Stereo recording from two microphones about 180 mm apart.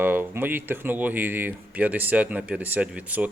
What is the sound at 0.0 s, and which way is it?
Speech, 10° right (ahead or behind).